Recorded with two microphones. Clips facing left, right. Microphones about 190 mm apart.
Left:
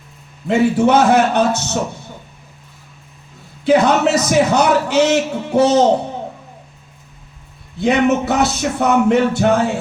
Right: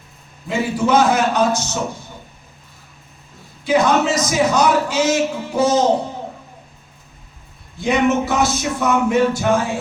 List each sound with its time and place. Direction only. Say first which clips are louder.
0.4 s speech: left 6 dB; 65° left (ahead or behind)
3.7 s speech: left 3 dB; 65° left (ahead or behind)
7.8 s speech: left 2 dB; 65° left (ahead or behind)